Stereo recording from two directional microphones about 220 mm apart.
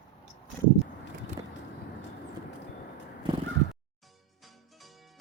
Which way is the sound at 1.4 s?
20° right (ahead or behind).